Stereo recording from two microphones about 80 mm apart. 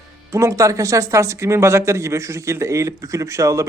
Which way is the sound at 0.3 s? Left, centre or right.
Right.